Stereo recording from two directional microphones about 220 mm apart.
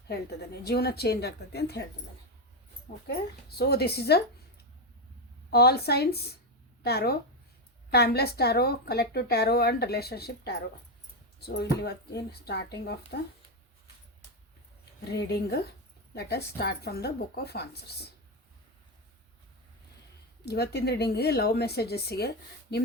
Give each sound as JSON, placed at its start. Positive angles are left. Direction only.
{"t": 0.1, "sound": "a woman's voice", "side_deg": 45}
{"t": 2.9, "sound": "a woman's voice", "side_deg": 35}
{"t": 5.5, "sound": "a woman's voice", "side_deg": 45}
{"t": 15.1, "sound": "a woman's voice", "side_deg": 50}
{"t": 20.4, "sound": "a woman's voice", "side_deg": 50}